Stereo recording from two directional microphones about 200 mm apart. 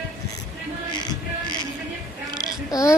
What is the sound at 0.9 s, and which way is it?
Music, 20° left (ahead or behind).